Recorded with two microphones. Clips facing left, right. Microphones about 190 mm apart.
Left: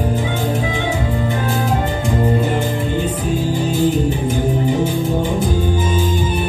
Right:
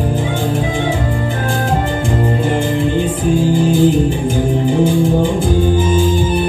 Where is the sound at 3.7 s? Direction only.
30° right (ahead or behind).